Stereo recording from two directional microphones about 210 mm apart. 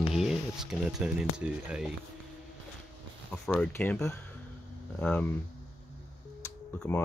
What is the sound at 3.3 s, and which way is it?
Speech, 5° left (ahead or behind).